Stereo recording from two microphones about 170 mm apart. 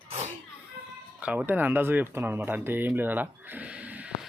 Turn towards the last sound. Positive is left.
turn(degrees=-10)  # may be behind; listen again after turning